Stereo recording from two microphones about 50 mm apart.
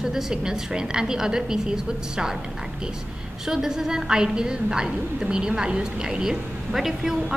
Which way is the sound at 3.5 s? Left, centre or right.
Centre.